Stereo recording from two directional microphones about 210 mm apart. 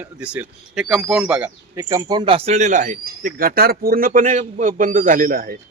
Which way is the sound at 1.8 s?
20° right (ahead or behind).